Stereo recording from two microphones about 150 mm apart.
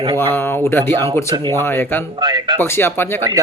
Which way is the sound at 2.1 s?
30° right (ahead or behind).